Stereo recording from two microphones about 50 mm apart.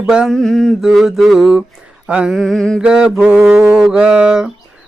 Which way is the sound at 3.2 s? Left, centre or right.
Centre.